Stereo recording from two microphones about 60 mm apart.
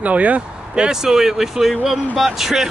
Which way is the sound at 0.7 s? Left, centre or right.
Centre.